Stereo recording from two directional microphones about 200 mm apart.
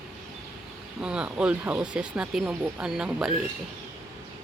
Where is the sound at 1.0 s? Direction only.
5° right (ahead or behind).